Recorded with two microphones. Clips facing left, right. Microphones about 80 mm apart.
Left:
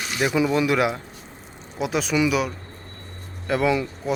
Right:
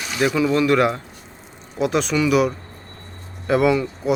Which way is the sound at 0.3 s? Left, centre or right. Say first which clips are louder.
Right 3 dB; centre.